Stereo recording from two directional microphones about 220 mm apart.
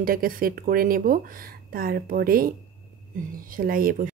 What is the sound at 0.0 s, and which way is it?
Speech, 40° right (ahead or behind).